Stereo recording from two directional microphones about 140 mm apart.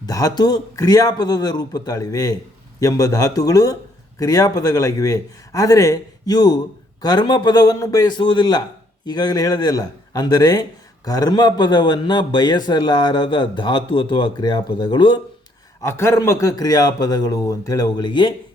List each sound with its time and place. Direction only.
0.0 s a man's voice: 25° left (ahead or behind)
8.2 s a man's voice: 35° left (ahead or behind)
15.8 s a man's voice: 20° left (ahead or behind); by 18.3 s 35° left (ahead or behind)